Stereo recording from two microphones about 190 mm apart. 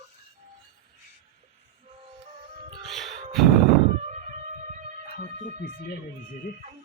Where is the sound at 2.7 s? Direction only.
30° right (ahead or behind).